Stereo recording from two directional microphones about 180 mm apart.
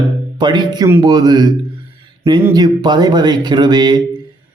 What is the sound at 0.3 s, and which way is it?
Speech, 25° right (ahead or behind).